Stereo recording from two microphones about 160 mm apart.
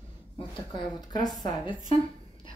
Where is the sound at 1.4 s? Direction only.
30° left (ahead or behind).